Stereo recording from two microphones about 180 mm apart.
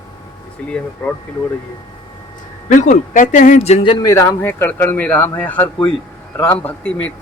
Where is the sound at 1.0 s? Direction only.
5° left (ahead or behind).